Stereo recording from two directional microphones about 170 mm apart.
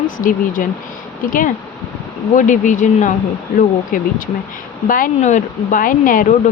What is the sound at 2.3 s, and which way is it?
Speech, 50° left (ahead or behind).